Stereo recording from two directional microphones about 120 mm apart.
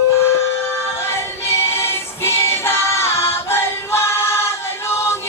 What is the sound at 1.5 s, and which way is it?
Singing, 20° left (ahead or behind).